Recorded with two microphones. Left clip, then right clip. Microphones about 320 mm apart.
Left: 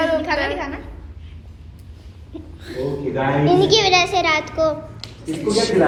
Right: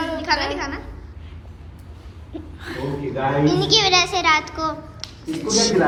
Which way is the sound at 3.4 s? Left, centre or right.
Centre.